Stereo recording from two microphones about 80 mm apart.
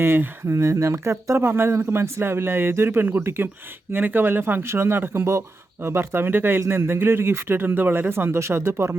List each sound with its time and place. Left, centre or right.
0.0 s a man's voice: right
0.5 s a man's voice: right